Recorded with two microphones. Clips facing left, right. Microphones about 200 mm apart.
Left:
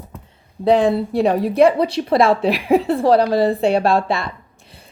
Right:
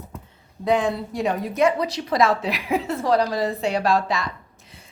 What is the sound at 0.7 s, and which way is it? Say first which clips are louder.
A woman's voice: left 7 dB; 35° left (ahead or behind).